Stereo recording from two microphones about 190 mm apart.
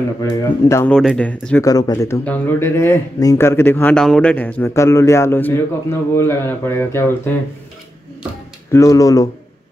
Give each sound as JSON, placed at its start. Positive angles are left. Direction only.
{"t": 0.2, "sound": "speech", "side_deg": 15}
{"t": 0.9, "sound": "speech", "side_deg": 5}
{"t": 1.7, "sound": "speech", "side_deg": 20}
{"t": 8.7, "sound": "speech", "side_deg": 15}